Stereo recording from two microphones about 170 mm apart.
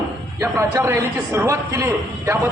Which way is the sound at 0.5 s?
15° right (ahead or behind).